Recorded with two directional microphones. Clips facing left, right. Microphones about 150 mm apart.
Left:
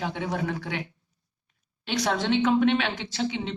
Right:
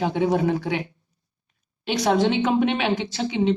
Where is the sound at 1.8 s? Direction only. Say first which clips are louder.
Right 6 dB; 10° right (ahead or behind).